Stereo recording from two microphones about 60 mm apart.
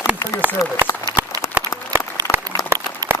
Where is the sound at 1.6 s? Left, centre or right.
Right.